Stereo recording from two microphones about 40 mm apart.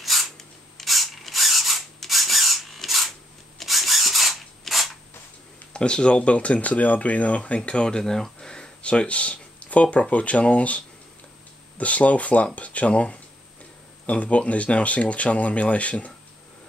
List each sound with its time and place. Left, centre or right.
0.0 s a sound: centre
2.0 s filing: centre
3.5 s a sound: centre
5.7 s speech: left
8.0 s speech: centre; by 10.8 s left
11.8 s speech: left